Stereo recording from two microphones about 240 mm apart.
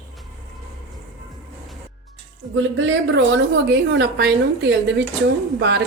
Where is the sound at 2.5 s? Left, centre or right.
Right.